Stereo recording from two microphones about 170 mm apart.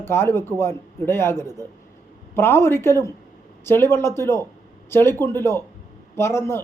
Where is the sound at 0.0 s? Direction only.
15° left (ahead or behind).